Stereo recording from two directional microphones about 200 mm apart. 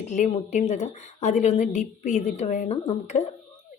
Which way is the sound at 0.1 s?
35° left (ahead or behind).